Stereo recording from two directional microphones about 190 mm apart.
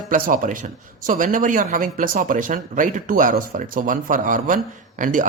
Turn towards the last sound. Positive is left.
turn(degrees=-45)  # may be behind; listen again after turning